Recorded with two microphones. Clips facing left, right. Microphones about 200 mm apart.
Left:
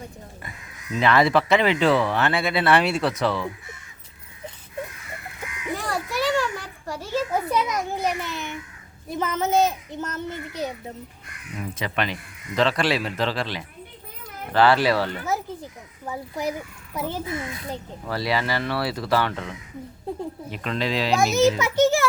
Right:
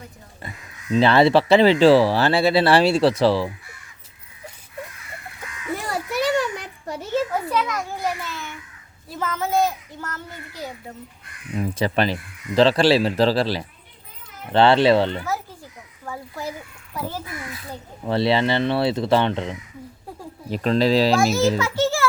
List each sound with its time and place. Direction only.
0.9 s speech: 30° right (ahead or behind)
5.7 s children playing: 20° right (ahead or behind)
7.4 s a child's voice: 20° left (ahead or behind)
11.5 s speech: 35° right (ahead or behind)
16.0 s a child's voice: 20° left (ahead or behind)
18.0 s speech: 25° right (ahead or behind)
21.6 s a child's voice: 20° left (ahead or behind)